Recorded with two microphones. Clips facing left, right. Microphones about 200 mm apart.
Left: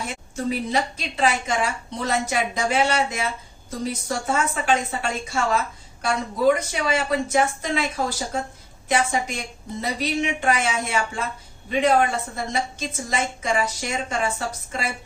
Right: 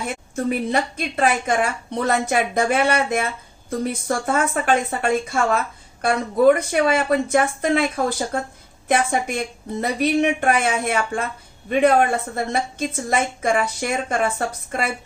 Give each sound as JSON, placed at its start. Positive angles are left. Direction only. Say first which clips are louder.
{"t": 0.1, "sound": "a woman's voice", "louder": "right 5 dB", "side_deg": -55}